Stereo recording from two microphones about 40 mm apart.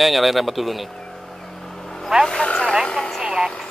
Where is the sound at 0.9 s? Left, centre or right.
Centre.